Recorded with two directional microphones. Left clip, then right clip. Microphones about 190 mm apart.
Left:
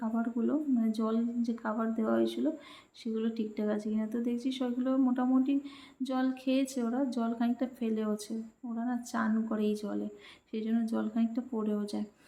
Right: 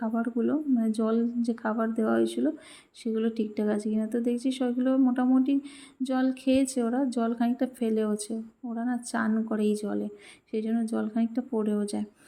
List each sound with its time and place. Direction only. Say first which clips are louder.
0.0 s speech: right 5 dB; 25° right (ahead or behind)